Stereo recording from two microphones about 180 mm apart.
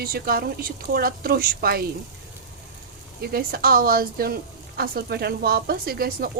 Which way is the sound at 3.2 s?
55° right (ahead or behind).